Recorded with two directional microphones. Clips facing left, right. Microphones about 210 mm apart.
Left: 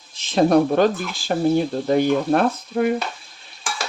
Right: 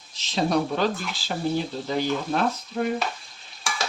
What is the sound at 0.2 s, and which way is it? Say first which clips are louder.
Speech: left 8 dB; 55° left (ahead or behind).